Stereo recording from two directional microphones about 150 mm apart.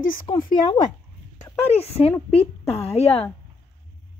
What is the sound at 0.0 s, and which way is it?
Speech, 65° left (ahead or behind).